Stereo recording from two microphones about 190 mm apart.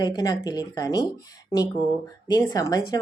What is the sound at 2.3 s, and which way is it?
Speech, 20° left (ahead or behind).